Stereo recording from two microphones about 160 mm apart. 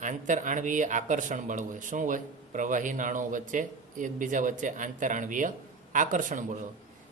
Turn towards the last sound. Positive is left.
turn(degrees=-55)  # may be behind; listen again after turning